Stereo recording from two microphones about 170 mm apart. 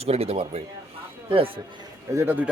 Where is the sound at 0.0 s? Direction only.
35° right (ahead or behind).